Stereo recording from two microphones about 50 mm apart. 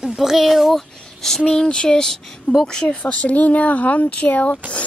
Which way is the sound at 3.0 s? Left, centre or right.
Left.